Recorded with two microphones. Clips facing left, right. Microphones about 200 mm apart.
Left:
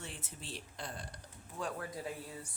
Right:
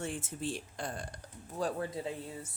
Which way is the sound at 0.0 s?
50° right (ahead or behind).